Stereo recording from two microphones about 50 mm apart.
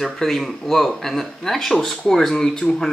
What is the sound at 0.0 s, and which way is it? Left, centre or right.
Speech, centre.